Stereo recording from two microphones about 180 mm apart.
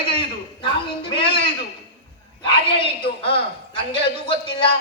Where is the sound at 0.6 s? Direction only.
30° left (ahead or behind).